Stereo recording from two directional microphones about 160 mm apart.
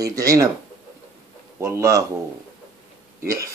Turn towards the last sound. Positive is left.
turn(degrees=-20)  # may be behind; listen again after turning